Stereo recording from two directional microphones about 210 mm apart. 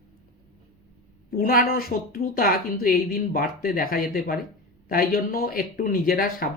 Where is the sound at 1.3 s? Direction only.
45° left (ahead or behind).